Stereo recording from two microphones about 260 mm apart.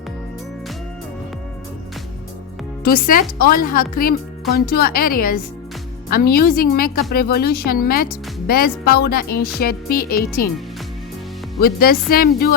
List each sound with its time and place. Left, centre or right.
2.8 s music: left
11.6 s music: left